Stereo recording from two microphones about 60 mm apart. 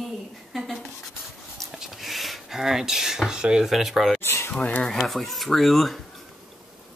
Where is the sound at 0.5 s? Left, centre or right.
Centre.